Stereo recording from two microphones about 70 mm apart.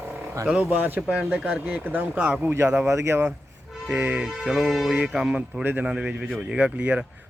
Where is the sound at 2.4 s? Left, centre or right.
Right.